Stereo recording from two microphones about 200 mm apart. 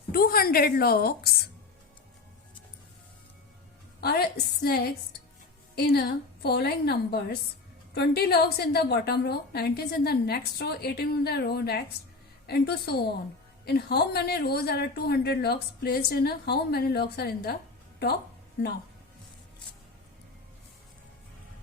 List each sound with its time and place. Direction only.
0.1 s a woman's voice: 50° left (ahead or behind)
4.0 s a woman's voice: 50° left (ahead or behind)